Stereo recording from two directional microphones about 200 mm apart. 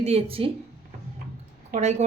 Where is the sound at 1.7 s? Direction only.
35° right (ahead or behind).